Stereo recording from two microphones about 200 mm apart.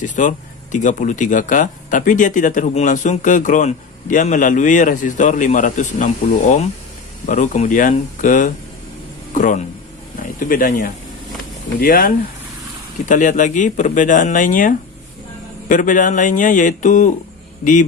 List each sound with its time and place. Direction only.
0.0 s speech: 40° left (ahead or behind)